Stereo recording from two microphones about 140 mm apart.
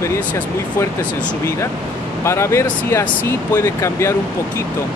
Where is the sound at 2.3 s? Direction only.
20° left (ahead or behind).